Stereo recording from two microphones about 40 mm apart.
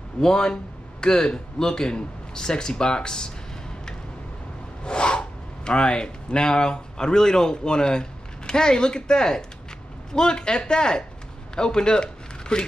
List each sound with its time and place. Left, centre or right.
0.2 s a man's voice: centre
4.8 s speech: left